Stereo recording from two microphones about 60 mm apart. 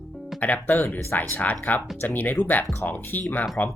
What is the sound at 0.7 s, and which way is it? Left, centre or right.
Speech, left.